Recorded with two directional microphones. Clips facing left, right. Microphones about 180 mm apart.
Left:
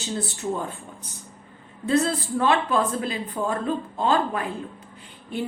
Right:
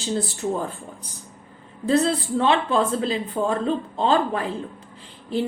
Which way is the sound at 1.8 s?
30° right (ahead or behind).